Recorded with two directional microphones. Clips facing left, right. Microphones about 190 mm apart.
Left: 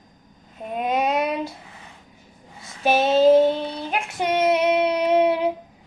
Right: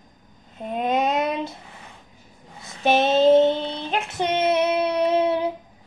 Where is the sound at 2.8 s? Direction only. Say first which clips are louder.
Left 1 dB; 5° left (ahead or behind).